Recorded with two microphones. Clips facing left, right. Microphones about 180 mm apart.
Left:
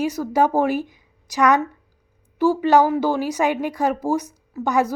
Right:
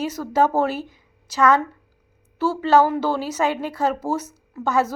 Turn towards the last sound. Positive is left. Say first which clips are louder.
# left 1 dB
turn(degrees=15)  # may be behind; listen again after turning